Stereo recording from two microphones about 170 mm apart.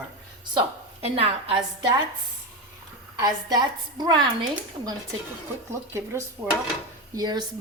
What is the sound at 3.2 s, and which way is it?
Speech, 25° right (ahead or behind).